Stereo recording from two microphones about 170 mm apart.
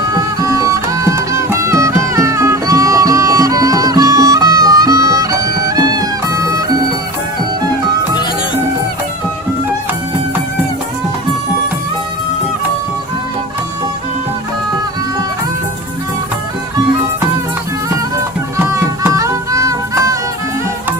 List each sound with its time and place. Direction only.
0.1 s music: 20° right (ahead or behind)
18.5 s music: 15° right (ahead or behind)